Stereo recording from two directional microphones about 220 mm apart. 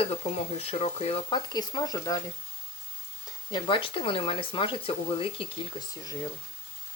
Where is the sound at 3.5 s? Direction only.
20° left (ahead or behind).